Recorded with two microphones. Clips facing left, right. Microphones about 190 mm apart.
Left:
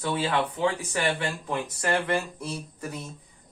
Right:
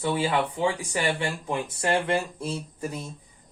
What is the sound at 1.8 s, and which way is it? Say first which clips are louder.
Speech: right 2 dB; 25° right (ahead or behind).